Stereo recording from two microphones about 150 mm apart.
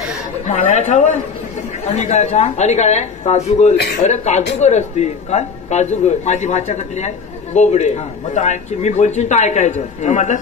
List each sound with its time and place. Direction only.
0.5 s a man's voice: 50° left (ahead or behind)